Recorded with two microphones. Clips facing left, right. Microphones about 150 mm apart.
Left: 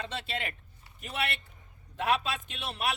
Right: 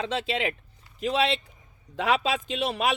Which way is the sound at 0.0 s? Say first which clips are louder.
Right 8 dB; 90° right.